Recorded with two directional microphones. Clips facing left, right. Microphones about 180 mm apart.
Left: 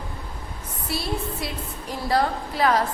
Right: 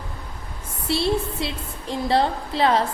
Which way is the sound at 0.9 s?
25° right (ahead or behind).